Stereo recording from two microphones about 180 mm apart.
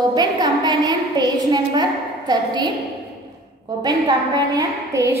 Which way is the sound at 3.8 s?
20° right (ahead or behind).